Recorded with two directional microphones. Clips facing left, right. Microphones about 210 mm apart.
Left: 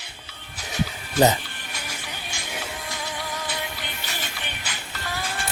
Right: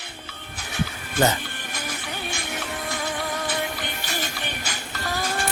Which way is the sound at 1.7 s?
55° right (ahead or behind).